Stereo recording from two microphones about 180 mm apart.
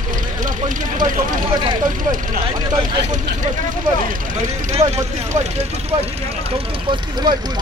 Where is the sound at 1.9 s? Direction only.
50° right (ahead or behind).